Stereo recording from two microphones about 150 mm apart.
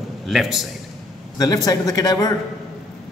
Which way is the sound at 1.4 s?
25° left (ahead or behind).